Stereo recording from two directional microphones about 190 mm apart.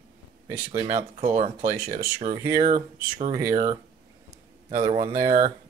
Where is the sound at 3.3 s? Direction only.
15° right (ahead or behind).